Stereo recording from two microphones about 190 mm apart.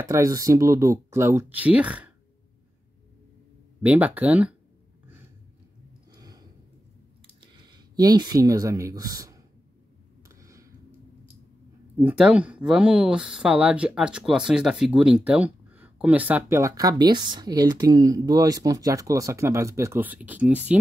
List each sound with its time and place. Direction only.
0.0 s speech: 15° right (ahead or behind)
3.8 s speech: 10° right (ahead or behind)
6.1 s a sound: 20° right (ahead or behind)
7.3 s speech: 20° right (ahead or behind)
10.2 s a sound: 15° right (ahead or behind)
12.0 s speech: 10° right (ahead or behind)